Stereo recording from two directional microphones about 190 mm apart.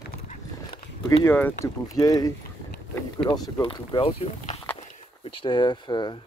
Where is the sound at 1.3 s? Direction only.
10° left (ahead or behind).